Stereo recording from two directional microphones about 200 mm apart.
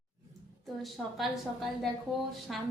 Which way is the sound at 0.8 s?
Centre (ahead or behind).